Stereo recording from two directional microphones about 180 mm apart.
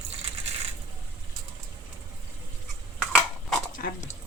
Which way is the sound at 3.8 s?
45° left (ahead or behind).